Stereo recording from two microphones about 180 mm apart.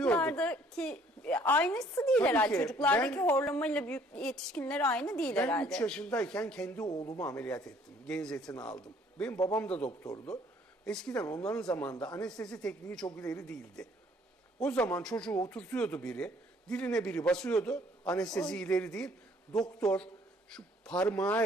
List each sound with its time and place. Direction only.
0.0 s a woman's voice: 5° left (ahead or behind)
6.8 s speech: 20° left (ahead or behind)
7.2 s a woman's voice: 5° left (ahead or behind)
13.2 s speech: 20° left (ahead or behind)
14.6 s a woman's voice: 10° left (ahead or behind)